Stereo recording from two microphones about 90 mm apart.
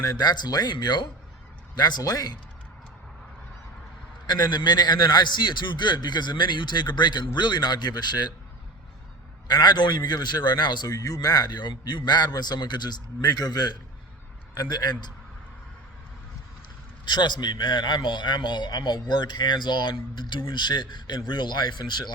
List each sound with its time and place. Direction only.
0.0 s a man's voice: 50° left (ahead or behind)
4.3 s a man's voice: 50° left (ahead or behind)
9.5 s a man's voice: 50° left (ahead or behind)
17.1 s a man's voice: 55° left (ahead or behind)